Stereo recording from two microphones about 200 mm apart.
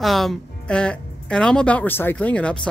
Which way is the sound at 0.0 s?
Centre (ahead or behind).